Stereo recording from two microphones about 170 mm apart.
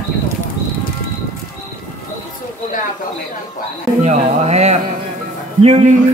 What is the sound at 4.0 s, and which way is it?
Speech, 40° right (ahead or behind).